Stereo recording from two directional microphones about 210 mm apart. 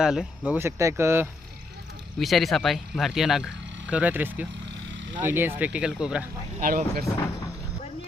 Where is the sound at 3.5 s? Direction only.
60° right (ahead or behind).